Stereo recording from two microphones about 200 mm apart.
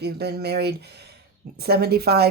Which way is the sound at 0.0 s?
55° right (ahead or behind).